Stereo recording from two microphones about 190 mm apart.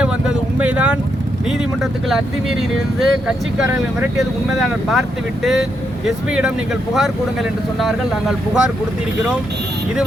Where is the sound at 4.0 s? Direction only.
Centre (ahead or behind).